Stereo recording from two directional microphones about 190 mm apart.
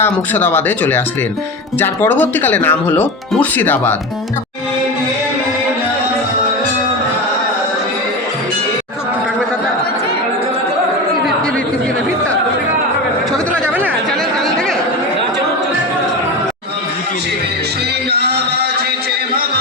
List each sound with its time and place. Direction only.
0.0 s speech: 10° left (ahead or behind)
18.1 s music: 60° right (ahead or behind)